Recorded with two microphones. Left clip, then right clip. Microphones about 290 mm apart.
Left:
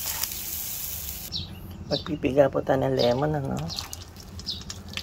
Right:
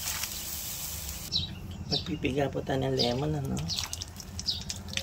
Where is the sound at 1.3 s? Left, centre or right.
Right.